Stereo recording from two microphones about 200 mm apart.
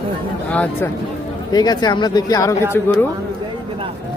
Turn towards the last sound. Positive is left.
turn(degrees=15)  # may be behind; listen again after turning